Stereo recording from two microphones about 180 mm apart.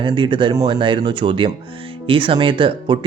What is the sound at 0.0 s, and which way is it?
Speech, 25° right (ahead or behind).